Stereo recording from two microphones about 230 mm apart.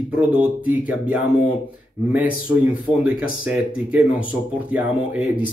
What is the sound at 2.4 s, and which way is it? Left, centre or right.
Speech, centre.